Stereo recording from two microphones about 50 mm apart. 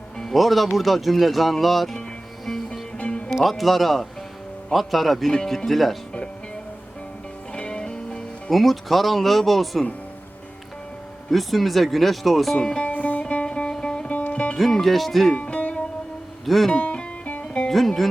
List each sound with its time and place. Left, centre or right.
0.2 s speech: centre
2.5 s music: centre
3.0 s music: left
3.4 s speech: centre
7.5 s music: centre
8.4 s speech: centre
11.3 s speech: centre
12.5 s speech: centre
12.9 s music: left
13.7 s music: centre
14.1 s music: left
14.6 s speech: centre
15.4 s music: left
17.7 s speech: centre